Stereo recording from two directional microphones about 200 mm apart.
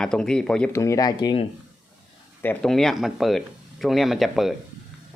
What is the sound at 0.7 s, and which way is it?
Speech, 15° left (ahead or behind).